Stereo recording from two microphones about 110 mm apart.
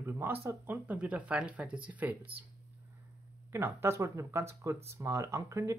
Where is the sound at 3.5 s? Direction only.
25° right (ahead or behind).